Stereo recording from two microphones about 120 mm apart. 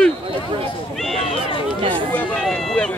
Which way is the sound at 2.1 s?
10° left (ahead or behind).